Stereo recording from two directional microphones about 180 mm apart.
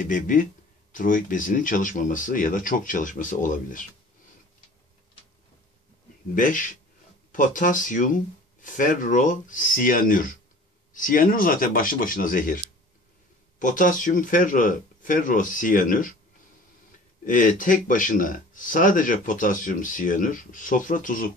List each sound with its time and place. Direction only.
0.0 s speech: 50° left (ahead or behind)
6.3 s speech: 45° left (ahead or behind)
13.6 s speech: 45° left (ahead or behind)
17.3 s speech: 50° left (ahead or behind)